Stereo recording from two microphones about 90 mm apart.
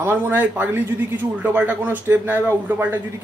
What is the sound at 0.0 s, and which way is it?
Speech, 25° right (ahead or behind).